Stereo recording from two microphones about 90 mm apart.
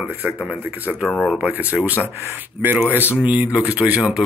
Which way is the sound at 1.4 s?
15° right (ahead or behind).